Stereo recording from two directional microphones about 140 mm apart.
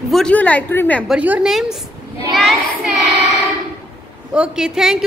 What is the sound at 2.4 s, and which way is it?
Child singing, centre (ahead or behind).